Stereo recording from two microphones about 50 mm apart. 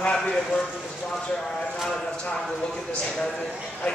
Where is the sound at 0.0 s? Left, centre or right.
Left.